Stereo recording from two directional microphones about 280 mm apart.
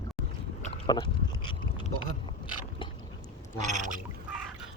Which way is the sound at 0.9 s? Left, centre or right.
Centre.